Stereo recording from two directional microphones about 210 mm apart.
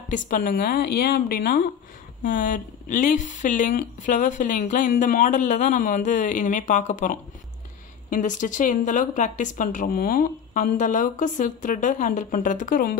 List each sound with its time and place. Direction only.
0.3 s a woman's voice: 40° left (ahead or behind)